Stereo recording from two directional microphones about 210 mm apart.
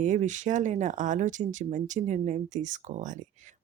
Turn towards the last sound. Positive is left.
turn(degrees=-35)  # may be behind; listen again after turning